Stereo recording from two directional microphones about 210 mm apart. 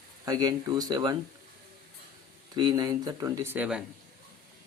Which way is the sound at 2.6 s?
20° right (ahead or behind).